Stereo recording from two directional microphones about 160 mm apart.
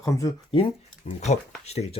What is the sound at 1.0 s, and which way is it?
Speech, 45° left (ahead or behind).